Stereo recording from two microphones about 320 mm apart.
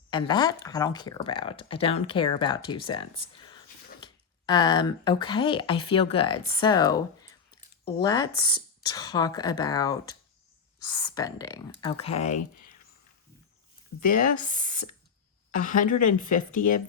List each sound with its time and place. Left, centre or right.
0.1 s speech: centre
14.0 s speech: left